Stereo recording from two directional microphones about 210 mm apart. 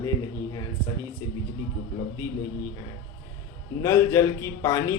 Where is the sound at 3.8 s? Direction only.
15° left (ahead or behind).